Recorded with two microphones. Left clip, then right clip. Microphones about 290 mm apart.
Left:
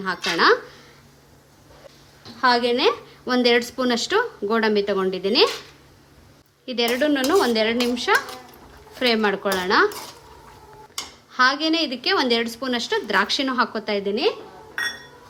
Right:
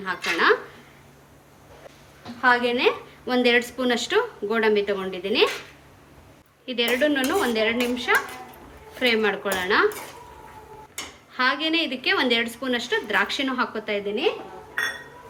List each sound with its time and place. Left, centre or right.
0.0 s a woman's voice: left
2.4 s a woman's voice: left
6.7 s a woman's voice: left
11.3 s a woman's voice: left